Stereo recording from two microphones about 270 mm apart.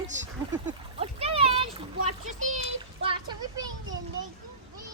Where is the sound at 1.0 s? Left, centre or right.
Right.